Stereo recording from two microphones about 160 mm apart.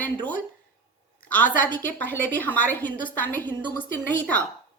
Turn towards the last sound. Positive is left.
turn(degrees=10)  # may be behind; listen again after turning